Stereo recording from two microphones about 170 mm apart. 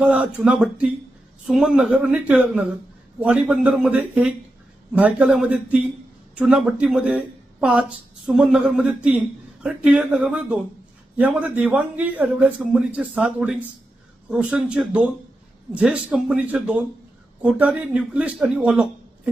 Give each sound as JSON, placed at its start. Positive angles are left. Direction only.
{"t": 0.0, "sound": "a man's voice", "side_deg": -10}